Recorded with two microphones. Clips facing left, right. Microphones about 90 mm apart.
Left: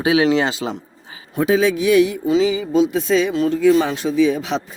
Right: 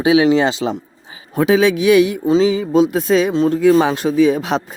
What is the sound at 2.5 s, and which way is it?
Speech, 50° right (ahead or behind).